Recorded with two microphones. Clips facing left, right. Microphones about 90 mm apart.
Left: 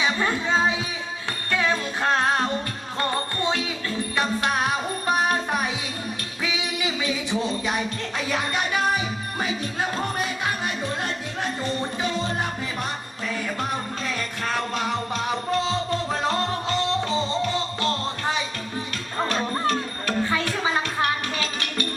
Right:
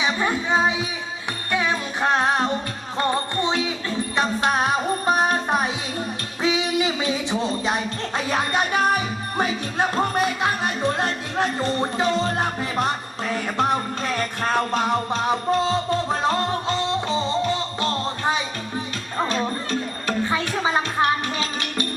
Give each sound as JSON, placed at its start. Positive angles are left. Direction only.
{"t": 0.0, "sound": "speech", "side_deg": -15}
{"t": 1.5, "sound": "music", "side_deg": -15}
{"t": 20.1, "sound": "music", "side_deg": -20}